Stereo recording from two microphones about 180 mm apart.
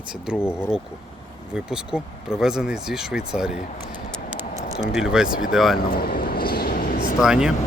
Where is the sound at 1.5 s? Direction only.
5° right (ahead or behind).